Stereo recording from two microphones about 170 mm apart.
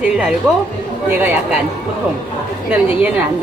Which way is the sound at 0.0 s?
5° right (ahead or behind).